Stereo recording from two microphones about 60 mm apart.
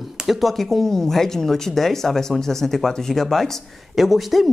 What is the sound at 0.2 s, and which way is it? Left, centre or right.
Speech, centre.